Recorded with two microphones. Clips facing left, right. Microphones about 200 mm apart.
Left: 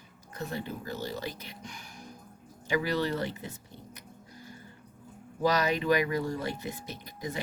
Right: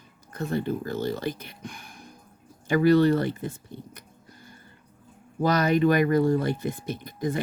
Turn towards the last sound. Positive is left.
turn(degrees=-50)  # may be behind; listen again after turning